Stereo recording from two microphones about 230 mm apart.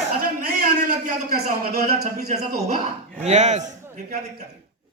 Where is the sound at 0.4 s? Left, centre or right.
Right.